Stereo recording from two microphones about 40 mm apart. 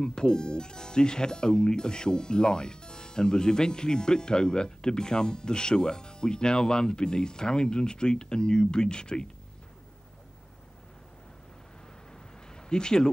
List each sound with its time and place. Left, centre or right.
0.0 s speech: centre
12.6 s speech: centre